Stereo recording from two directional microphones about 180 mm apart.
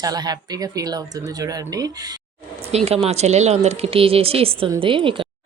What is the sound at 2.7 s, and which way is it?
Speech, 35° right (ahead or behind).